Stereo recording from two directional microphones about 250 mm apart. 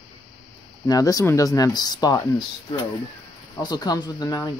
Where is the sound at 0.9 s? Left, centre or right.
Centre.